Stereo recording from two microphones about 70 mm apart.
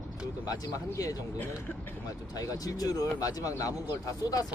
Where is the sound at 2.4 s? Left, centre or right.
Left.